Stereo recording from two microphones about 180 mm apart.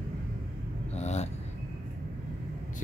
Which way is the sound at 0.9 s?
40° left (ahead or behind).